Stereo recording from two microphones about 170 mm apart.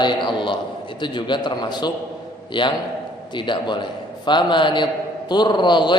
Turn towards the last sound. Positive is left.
turn(degrees=25)  # may be behind; listen again after turning